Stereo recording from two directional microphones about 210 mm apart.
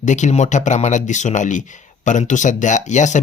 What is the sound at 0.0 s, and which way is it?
Speech, 35° left (ahead or behind).